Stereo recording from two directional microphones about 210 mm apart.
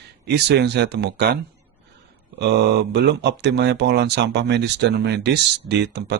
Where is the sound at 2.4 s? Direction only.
55° right (ahead or behind).